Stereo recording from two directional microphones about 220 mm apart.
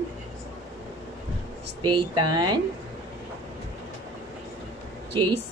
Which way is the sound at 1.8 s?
20° right (ahead or behind).